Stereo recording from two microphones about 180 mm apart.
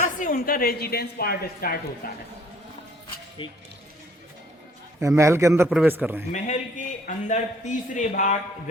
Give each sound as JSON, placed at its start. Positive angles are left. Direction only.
{"t": 0.2, "sound": "a woman's voice", "side_deg": 50}
{"t": 3.4, "sound": "speech", "side_deg": 25}
{"t": 4.9, "sound": "a man's voice", "side_deg": -15}
{"t": 6.3, "sound": "a man's voice", "side_deg": 45}